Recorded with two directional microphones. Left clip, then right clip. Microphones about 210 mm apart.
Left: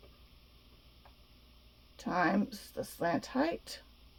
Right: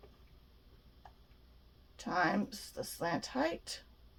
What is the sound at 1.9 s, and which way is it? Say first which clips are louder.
Speech: left 2 dB; 45° left (ahead or behind).